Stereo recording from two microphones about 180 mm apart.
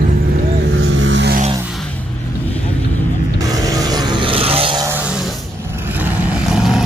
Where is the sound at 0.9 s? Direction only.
90° right.